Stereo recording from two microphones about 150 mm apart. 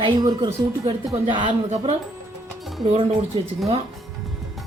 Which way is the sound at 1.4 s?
45° right (ahead or behind).